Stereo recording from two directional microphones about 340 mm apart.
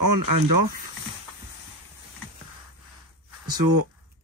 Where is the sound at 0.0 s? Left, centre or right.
Right.